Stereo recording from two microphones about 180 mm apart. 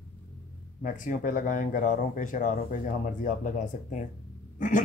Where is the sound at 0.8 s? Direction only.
45° left (ahead or behind).